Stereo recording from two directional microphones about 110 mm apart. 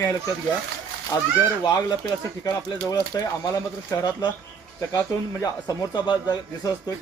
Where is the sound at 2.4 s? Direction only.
35° left (ahead or behind).